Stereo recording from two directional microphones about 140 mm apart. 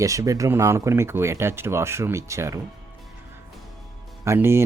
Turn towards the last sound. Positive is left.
turn(degrees=-20)  # may be behind; listen again after turning